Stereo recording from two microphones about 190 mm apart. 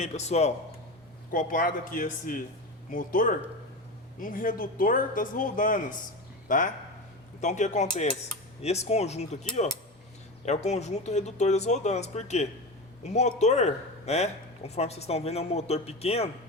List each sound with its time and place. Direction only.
0.0 s speech: 35° left (ahead or behind)
1.3 s speech: 45° left (ahead or behind)